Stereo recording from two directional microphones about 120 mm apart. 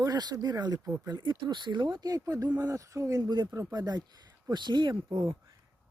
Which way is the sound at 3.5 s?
25° right (ahead or behind).